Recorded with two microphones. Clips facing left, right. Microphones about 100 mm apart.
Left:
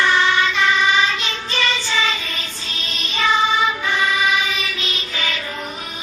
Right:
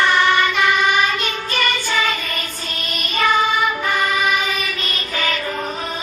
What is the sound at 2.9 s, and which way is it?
Music, 55° right (ahead or behind).